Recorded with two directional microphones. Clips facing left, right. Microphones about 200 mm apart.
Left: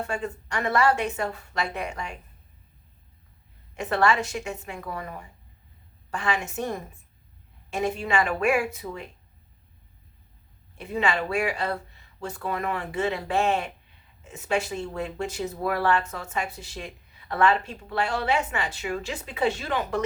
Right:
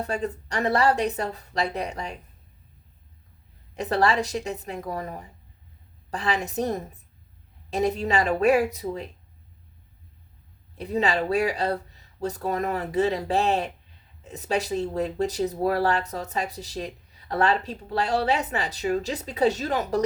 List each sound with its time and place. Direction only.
0.1 s speech: 35° right (ahead or behind)
3.8 s speech: 35° right (ahead or behind)
10.8 s speech: 35° right (ahead or behind)